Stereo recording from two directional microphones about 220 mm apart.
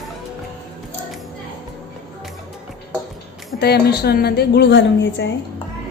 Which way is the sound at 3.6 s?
45° left (ahead or behind).